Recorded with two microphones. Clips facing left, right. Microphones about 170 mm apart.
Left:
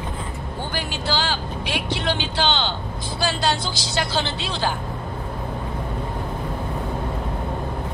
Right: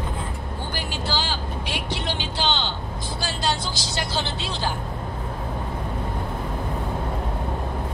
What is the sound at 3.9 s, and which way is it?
Speech, 70° left (ahead or behind).